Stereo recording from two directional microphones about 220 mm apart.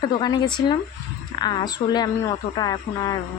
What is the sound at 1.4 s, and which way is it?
Speech, 20° left (ahead or behind).